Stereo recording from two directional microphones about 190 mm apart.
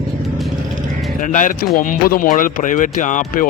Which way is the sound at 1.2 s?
40° left (ahead or behind).